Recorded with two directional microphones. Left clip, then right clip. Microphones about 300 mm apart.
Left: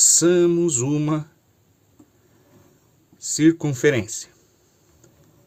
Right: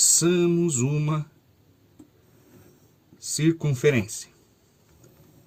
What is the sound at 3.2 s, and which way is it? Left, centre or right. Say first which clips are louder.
Speech: left 7 dB; left.